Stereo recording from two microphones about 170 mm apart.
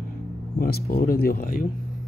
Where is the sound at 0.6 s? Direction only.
65° left (ahead or behind).